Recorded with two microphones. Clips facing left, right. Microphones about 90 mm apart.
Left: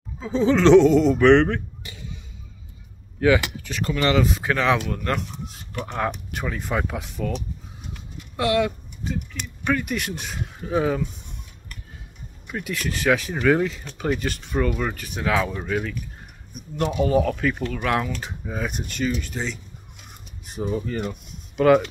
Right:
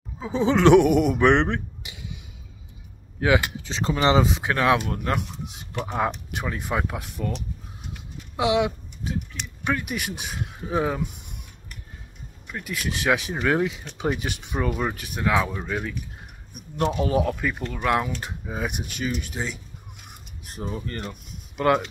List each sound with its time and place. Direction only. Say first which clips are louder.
0.2 s speech: left 1 dB; 15° right (ahead or behind)
3.2 s speech: left 3 dB; 10° right (ahead or behind)
3.6 s speech: right 1 dB; 25° right (ahead or behind)
4.5 s speech: even; 10° right (ahead or behind)
8.4 s speech: even; 15° right (ahead or behind)
12.4 s speech: left 4 dB; 5° left (ahead or behind)
12.7 s speech: left 2 dB; 10° right (ahead or behind)
17.0 s speech: left 7 dB; 10° right (ahead or behind)
20.7 s speech: left 8 dB; 5° left (ahead or behind)